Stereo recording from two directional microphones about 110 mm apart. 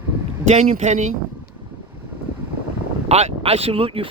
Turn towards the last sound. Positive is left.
turn(degrees=-60)  # may be behind; listen again after turning